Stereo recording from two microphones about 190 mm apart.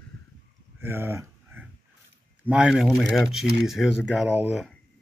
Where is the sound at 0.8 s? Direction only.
10° right (ahead or behind).